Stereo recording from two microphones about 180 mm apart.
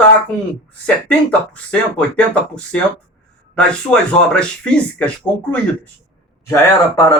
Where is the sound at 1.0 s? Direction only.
5° left (ahead or behind).